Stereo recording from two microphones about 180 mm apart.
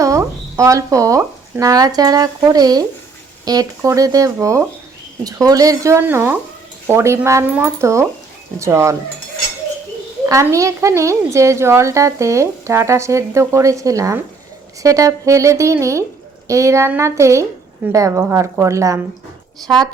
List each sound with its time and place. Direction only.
0.0 s a woman's voice: 15° right (ahead or behind)
10.2 s a woman's voice: 15° right (ahead or behind)